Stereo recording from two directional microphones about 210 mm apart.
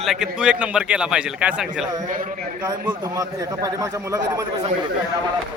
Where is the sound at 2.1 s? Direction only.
40° right (ahead or behind).